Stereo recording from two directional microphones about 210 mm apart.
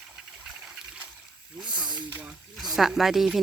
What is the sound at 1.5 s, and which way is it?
Snake, 5° right (ahead or behind).